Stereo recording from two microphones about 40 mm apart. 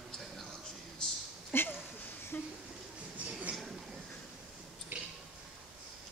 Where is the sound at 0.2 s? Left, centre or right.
Centre.